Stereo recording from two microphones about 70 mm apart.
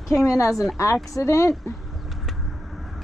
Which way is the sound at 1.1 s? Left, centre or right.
Left.